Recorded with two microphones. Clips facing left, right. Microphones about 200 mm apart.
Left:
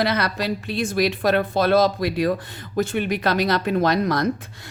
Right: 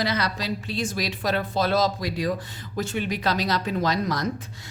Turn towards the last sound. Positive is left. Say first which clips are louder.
# left 5 dB
turn(degrees=60)  # may be behind; listen again after turning